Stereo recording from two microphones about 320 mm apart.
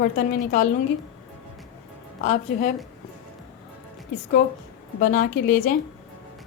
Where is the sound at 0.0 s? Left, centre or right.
Left.